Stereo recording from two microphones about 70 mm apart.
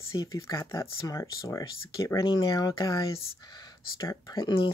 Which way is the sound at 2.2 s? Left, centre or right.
Left.